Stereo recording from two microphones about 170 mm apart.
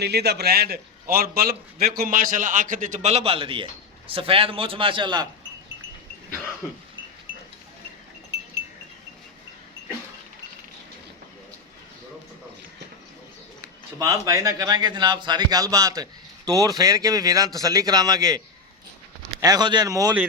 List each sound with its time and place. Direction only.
0.0 s a man's voice: 75° right (ahead or behind); by 5.3 s 25° right (ahead or behind)
14.0 s a man's voice: 20° right (ahead or behind)